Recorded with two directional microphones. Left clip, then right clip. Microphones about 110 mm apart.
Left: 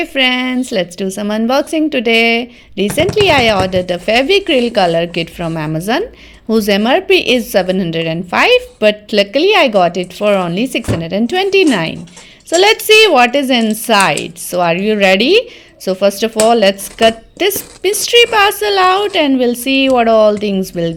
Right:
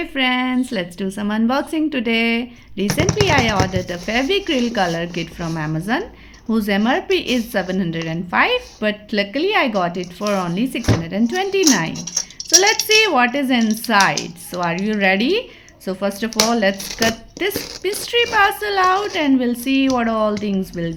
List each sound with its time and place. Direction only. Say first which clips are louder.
0.0 s a woman's voice: left 6 dB; 30° left (ahead or behind)